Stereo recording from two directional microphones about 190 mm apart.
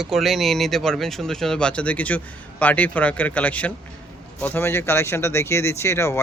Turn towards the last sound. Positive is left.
turn(degrees=15)  # may be behind; listen again after turning